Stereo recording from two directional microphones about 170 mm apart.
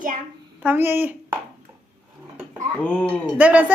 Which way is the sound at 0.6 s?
10° right (ahead or behind).